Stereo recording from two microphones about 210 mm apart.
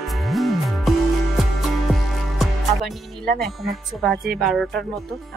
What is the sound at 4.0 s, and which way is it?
Speech, centre (ahead or behind).